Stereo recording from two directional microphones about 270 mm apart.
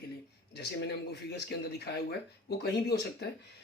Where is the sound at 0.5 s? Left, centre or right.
Left.